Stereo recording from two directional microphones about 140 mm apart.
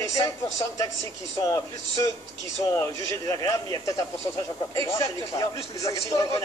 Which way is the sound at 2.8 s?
25° left (ahead or behind).